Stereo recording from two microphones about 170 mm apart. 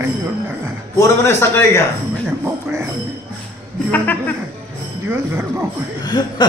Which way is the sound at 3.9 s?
10° left (ahead or behind).